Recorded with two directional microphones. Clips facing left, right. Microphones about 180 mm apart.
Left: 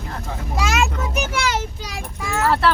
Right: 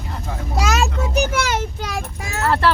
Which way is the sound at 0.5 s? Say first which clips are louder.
Right 1 dB; 40° right (ahead or behind).